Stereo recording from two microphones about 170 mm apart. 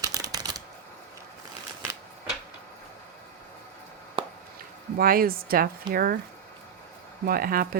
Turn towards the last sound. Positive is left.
turn(degrees=-60)  # may be behind; listen again after turning